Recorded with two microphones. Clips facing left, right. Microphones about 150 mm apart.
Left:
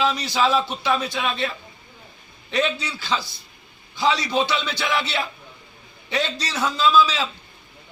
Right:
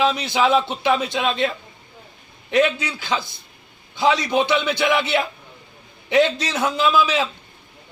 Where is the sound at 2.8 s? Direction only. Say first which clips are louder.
Right 2 dB; 15° right (ahead or behind).